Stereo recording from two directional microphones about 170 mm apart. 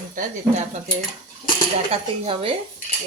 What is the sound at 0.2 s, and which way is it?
Speech, 40° right (ahead or behind).